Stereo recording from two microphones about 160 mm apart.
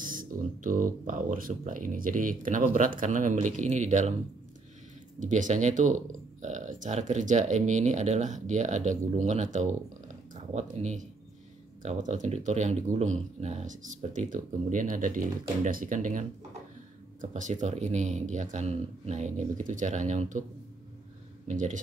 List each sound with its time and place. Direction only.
0.0 s speech: 60° right (ahead or behind)
5.2 s speech: 50° right (ahead or behind)
21.5 s speech: 50° right (ahead or behind)